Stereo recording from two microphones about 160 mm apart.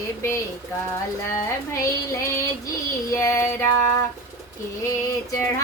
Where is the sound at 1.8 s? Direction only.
20° left (ahead or behind).